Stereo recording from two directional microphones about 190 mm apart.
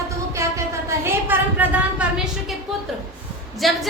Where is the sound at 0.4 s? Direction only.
15° right (ahead or behind).